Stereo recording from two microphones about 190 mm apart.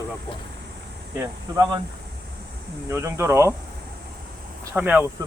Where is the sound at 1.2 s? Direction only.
20° right (ahead or behind).